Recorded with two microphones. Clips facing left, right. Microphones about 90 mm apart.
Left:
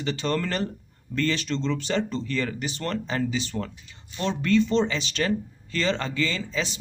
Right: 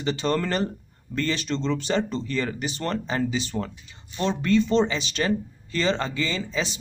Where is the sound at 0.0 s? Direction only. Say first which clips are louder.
Right 2 dB; 20° right (ahead or behind).